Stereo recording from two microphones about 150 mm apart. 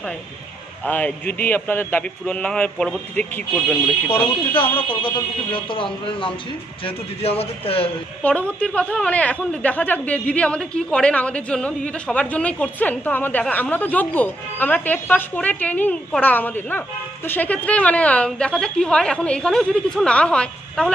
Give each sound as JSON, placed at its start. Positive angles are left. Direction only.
{"t": 0.8, "sound": "speech", "side_deg": 10}
{"t": 4.8, "sound": "speech", "side_deg": 35}
{"t": 8.2, "sound": "speech", "side_deg": 10}